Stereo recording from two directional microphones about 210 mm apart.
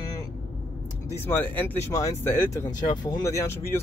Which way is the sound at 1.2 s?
10° left (ahead or behind).